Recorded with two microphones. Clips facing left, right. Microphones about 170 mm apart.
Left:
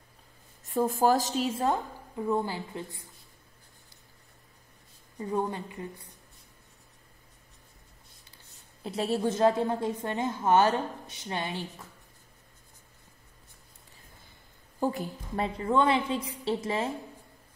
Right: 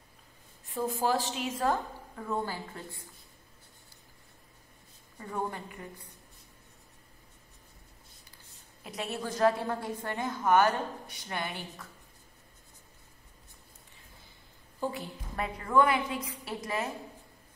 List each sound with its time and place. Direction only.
0.7 s a woman's voice: 45° left (ahead or behind)
1.6 s a woman's voice: 20° left (ahead or behind)
5.2 s a woman's voice: 20° left (ahead or behind)
8.8 s a woman's voice: 30° left (ahead or behind)
14.8 s a woman's voice: 45° left (ahead or behind)
15.3 s a woman's voice: 30° left (ahead or behind)